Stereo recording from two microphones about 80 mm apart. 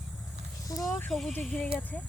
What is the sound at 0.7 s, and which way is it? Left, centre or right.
Speech, left.